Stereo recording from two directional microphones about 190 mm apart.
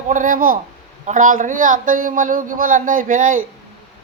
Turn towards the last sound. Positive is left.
turn(degrees=-45)  # may be behind; listen again after turning